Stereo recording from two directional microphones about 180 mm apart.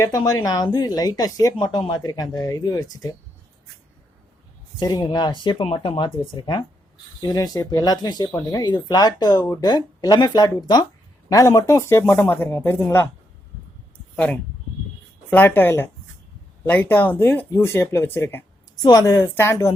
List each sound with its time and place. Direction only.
0.0 s speech: 20° left (ahead or behind)
4.8 s speech: 20° left (ahead or behind)
15.3 s speech: 10° left (ahead or behind)
18.8 s speech: 20° left (ahead or behind)